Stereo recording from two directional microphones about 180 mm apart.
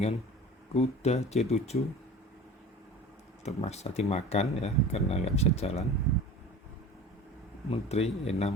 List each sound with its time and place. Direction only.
0.7 s speech: 35° left (ahead or behind)
3.4 s speech: 35° left (ahead or behind)
7.7 s speech: 35° left (ahead or behind)